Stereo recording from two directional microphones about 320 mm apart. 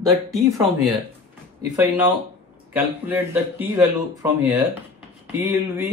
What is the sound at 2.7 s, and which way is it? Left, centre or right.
Speech, centre.